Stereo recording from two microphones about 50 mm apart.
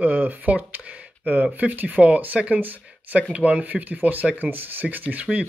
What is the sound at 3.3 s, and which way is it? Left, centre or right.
Speech, right.